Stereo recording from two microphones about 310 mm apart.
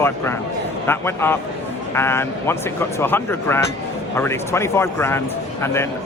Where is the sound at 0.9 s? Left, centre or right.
Centre.